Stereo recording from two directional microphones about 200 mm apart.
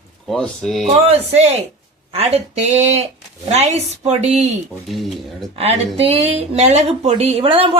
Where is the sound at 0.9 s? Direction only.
30° right (ahead or behind).